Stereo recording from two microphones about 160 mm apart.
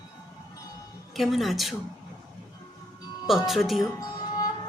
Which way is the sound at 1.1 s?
Centre (ahead or behind).